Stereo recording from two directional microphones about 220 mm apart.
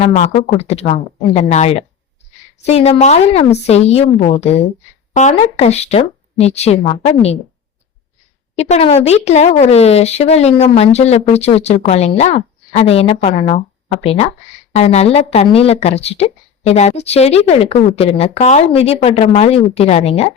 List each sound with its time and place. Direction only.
0.0 s a woman's voice: 30° left (ahead or behind)
8.5 s a woman's voice: 30° left (ahead or behind)